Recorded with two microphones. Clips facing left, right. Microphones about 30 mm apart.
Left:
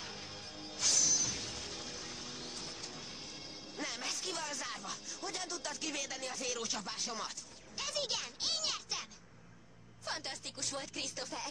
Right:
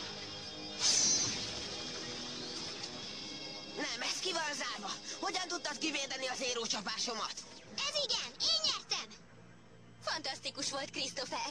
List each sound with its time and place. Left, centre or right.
0.0 s music: centre
3.8 s speech: centre
8.4 s music: right
10.0 s speech: centre
10.4 s speech: right
11.1 s speech: centre